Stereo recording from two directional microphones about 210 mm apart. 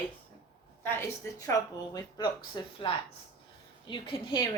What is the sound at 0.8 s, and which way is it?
A woman's voice, 10° left (ahead or behind).